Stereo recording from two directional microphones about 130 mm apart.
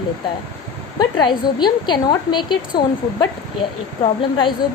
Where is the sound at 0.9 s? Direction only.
35° left (ahead or behind).